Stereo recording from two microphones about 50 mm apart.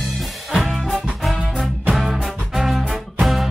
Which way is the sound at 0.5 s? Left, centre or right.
Centre.